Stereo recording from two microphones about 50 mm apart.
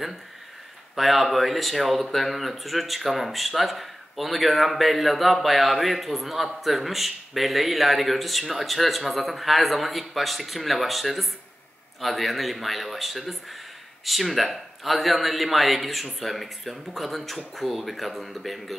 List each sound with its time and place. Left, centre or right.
0.9 s speech: centre